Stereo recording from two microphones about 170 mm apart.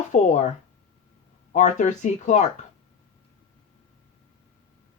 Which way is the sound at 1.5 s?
45° left (ahead or behind).